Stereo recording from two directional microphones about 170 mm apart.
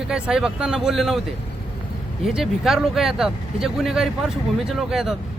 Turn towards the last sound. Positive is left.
turn(degrees=0)  # may be behind; listen again after turning